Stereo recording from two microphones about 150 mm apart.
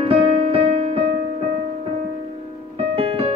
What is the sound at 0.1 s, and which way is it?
Music, 40° right (ahead or behind).